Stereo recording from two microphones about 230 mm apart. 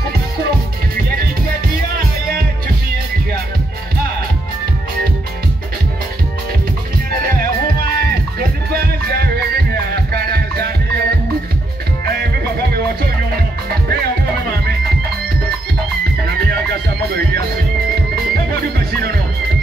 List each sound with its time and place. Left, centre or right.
7.1 s music: right
16.3 s music: right